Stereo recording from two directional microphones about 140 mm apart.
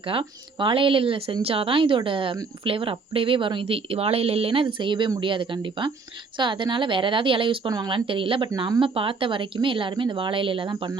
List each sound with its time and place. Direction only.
0.1 s speech: 40° right (ahead or behind)